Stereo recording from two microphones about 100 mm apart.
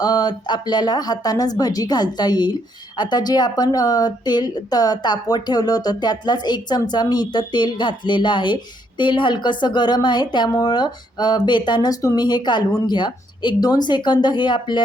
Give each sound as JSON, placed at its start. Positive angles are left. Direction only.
{"t": 0.0, "sound": "a woman's voice", "side_deg": 40}